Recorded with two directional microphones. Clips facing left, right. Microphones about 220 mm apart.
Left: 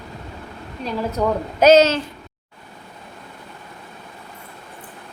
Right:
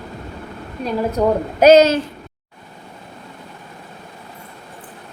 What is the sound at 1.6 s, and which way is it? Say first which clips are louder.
Speech: right 3 dB; 15° right (ahead or behind).